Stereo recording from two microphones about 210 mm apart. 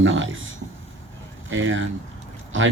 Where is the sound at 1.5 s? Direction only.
65° right (ahead or behind).